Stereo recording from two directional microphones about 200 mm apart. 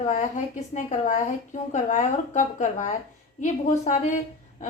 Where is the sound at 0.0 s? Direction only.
40° left (ahead or behind).